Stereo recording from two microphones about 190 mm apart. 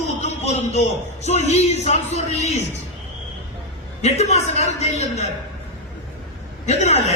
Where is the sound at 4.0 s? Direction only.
35° left (ahead or behind).